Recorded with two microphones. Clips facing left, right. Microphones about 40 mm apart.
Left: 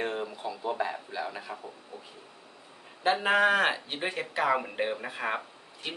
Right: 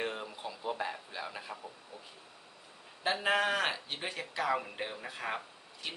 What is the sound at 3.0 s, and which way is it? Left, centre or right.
Speech, left.